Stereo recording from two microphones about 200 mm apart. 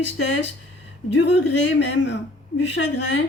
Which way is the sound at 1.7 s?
60° left (ahead or behind).